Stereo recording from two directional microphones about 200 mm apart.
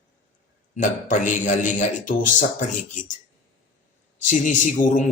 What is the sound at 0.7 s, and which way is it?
A man's voice, 40° left (ahead or behind).